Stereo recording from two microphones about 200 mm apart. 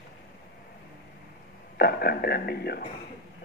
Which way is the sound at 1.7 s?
50° left (ahead or behind).